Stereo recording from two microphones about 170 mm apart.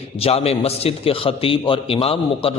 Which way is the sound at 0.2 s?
35° left (ahead or behind).